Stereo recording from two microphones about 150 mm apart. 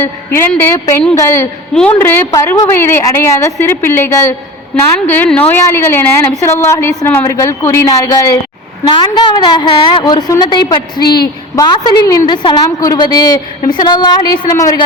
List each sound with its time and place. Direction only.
0.0 s a woman's voice: 15° left (ahead or behind)